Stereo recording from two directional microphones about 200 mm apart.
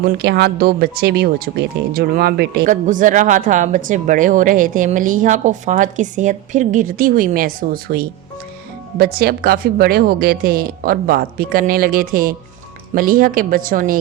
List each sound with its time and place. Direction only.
0.0 s a woman's voice: 55° right (ahead or behind)
2.6 s a woman's voice: 40° right (ahead or behind)